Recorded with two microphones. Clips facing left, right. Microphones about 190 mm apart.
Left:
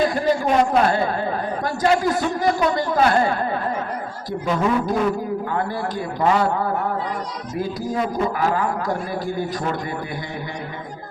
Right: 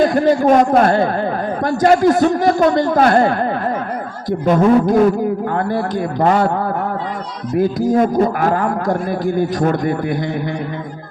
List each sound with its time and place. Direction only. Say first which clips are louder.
0.0 s a man's voice: right 7 dB; 50° right (ahead or behind)
7.9 s a man's voice: right 7 dB; 50° right (ahead or behind)